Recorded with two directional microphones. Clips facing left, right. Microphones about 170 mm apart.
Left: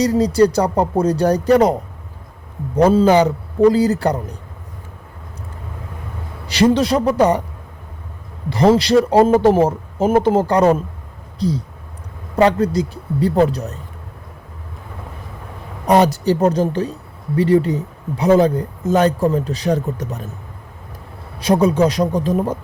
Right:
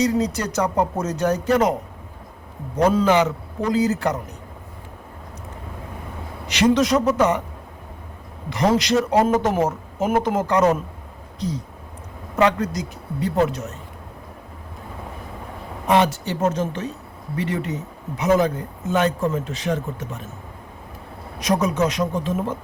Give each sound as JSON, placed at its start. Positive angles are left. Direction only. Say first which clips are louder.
{"t": 0.0, "sound": "speech", "louder": "left 7 dB", "side_deg": 35}
{"t": 2.7, "sound": "speech", "louder": "left 5 dB", "side_deg": 30}
{"t": 6.5, "sound": "speech", "louder": "left 3 dB", "side_deg": 35}
{"t": 8.4, "sound": "speech", "louder": "left 6 dB", "side_deg": 30}
{"t": 15.9, "sound": "speech", "louder": "left 5 dB", "side_deg": 40}
{"t": 21.3, "sound": "speech", "louder": "left 6 dB", "side_deg": 30}